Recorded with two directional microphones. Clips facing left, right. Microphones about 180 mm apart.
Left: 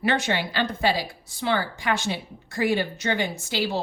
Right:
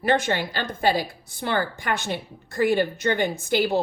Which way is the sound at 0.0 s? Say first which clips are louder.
Right 2 dB; 50° right (ahead or behind).